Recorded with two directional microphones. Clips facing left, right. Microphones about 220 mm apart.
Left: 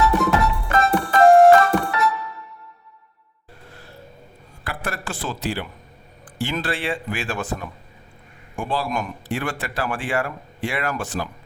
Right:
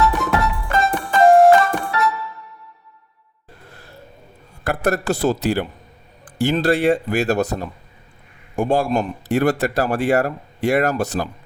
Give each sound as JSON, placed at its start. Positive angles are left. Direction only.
{"t": 0.0, "sound": "music", "side_deg": 0}
{"t": 4.6, "sound": "a man's voice", "side_deg": -45}